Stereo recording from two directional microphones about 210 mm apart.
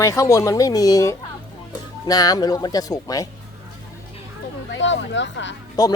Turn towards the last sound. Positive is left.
turn(degrees=20)  # may be behind; listen again after turning